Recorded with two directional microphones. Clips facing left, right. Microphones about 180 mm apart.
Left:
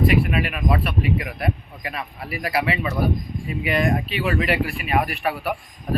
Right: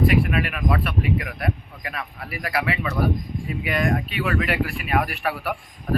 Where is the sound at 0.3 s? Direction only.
20° left (ahead or behind).